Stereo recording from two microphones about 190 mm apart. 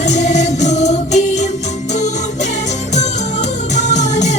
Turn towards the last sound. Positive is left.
turn(degrees=40)  # may be behind; listen again after turning